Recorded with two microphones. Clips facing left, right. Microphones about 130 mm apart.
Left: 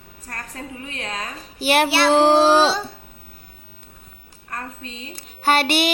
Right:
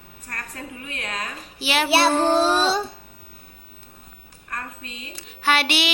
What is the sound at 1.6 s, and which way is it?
Speech, 55° left (ahead or behind).